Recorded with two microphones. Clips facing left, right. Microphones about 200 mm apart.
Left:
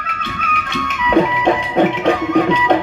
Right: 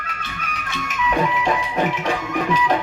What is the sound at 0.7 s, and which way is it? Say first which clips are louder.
Music: left 4 dB; 85° left.